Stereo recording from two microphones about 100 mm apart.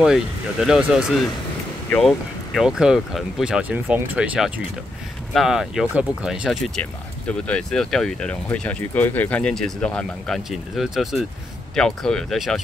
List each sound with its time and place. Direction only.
0.0 s speech: 5° right (ahead or behind)
5.3 s speech: 5° right (ahead or behind)
6.8 s speech: 10° left (ahead or behind)